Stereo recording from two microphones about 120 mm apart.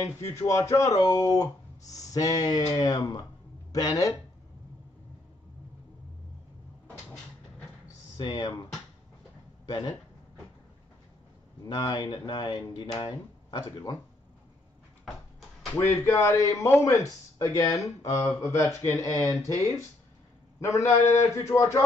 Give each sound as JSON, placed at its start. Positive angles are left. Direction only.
{"t": 0.0, "sound": "speech", "side_deg": 25}
{"t": 8.2, "sound": "speech", "side_deg": 40}
{"t": 9.7, "sound": "speech", "side_deg": 30}
{"t": 11.6, "sound": "speech", "side_deg": 35}
{"t": 15.9, "sound": "speech", "side_deg": 25}
{"t": 21.1, "sound": "speech", "side_deg": 25}